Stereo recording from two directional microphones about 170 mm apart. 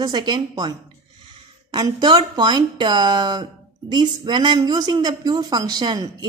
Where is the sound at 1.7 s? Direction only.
25° right (ahead or behind).